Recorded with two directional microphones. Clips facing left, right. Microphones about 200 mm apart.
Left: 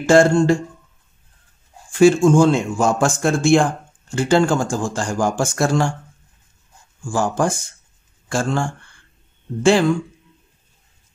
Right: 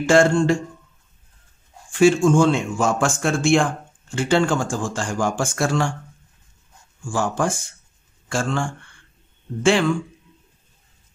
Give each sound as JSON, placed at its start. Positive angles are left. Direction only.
{"t": 0.0, "sound": "speech", "side_deg": 40}
{"t": 1.9, "sound": "speech", "side_deg": 40}
{"t": 7.1, "sound": "speech", "side_deg": 40}